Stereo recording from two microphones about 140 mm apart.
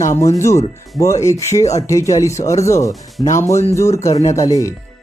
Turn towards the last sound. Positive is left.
turn(degrees=25)  # may be behind; listen again after turning